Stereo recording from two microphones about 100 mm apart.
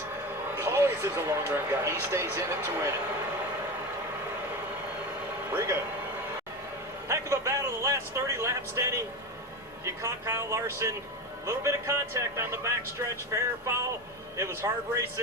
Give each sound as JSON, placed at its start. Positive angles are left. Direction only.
{"t": 0.5, "sound": "speech", "side_deg": -25}
{"t": 5.5, "sound": "speech", "side_deg": -25}
{"t": 7.1, "sound": "a man's voice", "side_deg": -30}